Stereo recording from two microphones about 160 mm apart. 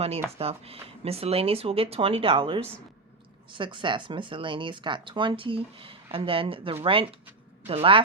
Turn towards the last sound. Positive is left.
turn(degrees=-35)  # may be behind; listen again after turning